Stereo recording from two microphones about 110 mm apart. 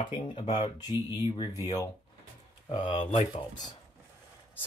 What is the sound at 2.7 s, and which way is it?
Speech, 50° left (ahead or behind).